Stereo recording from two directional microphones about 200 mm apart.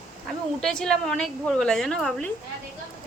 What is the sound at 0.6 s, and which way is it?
A woman's voice, 5° left (ahead or behind).